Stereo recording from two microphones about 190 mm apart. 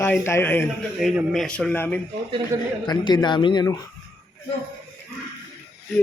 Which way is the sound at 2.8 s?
20° left (ahead or behind).